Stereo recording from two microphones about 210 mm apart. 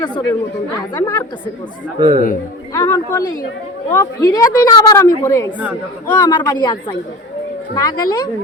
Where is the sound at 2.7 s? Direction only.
10° left (ahead or behind).